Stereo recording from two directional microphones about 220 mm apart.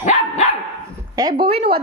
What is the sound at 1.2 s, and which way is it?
Speech, 20° right (ahead or behind).